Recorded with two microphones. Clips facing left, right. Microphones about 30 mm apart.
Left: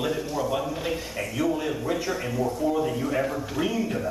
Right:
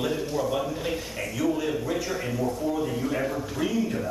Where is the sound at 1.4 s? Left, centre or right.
Centre.